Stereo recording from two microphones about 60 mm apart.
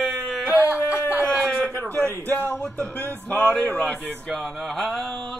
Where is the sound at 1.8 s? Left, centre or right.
Left.